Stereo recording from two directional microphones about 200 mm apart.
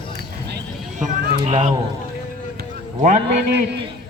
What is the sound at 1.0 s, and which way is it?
Speech, 35° right (ahead or behind).